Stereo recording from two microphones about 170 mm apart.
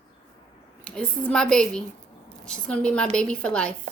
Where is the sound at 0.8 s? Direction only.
5° left (ahead or behind).